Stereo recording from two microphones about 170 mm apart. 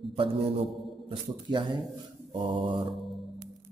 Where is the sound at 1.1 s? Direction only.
30° right (ahead or behind).